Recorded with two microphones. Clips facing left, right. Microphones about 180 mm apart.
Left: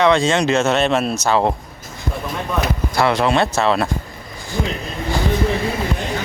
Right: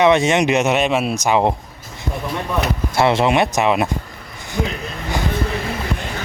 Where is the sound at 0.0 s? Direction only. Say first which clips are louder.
Right 1 dB; 20° right (ahead or behind).